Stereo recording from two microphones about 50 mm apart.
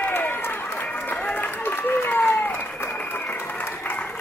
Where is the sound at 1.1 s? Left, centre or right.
Left.